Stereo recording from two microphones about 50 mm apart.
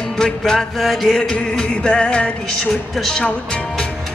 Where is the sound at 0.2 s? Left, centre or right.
Centre.